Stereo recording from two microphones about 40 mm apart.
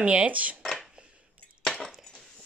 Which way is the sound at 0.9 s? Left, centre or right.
Right.